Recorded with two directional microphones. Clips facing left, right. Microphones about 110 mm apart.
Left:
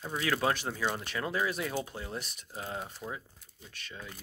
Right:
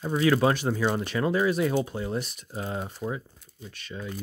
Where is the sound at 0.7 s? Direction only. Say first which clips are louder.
Right 7 dB; 30° right (ahead or behind).